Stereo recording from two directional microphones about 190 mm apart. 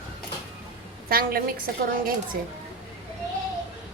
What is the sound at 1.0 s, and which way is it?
Speech, 50° right (ahead or behind).